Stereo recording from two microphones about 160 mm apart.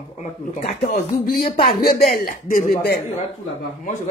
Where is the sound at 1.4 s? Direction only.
35° left (ahead or behind).